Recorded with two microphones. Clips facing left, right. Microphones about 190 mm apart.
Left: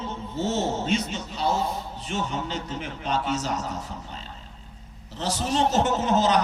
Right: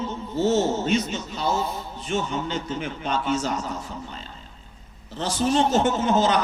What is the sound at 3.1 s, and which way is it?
Speech, 35° left (ahead or behind).